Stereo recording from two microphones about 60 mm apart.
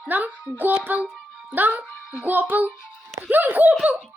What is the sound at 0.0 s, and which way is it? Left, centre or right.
A child's voice, right.